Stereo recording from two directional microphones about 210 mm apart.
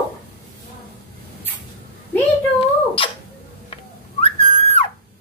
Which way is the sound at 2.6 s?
25° left (ahead or behind).